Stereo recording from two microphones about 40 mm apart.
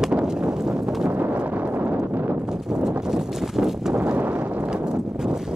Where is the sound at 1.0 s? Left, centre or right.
Right.